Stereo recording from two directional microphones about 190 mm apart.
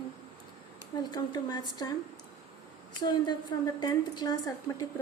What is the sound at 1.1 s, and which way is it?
Speech, 25° left (ahead or behind).